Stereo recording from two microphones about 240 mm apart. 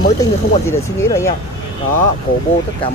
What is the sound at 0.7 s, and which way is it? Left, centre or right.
Speech, centre.